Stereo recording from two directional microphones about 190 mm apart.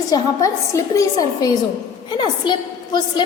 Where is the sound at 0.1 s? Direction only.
15° left (ahead or behind).